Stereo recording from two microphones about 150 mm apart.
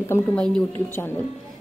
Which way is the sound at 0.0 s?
15° left (ahead or behind).